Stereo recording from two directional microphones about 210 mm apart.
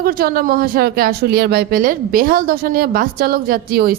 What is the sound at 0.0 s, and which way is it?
Speech, 45° right (ahead or behind).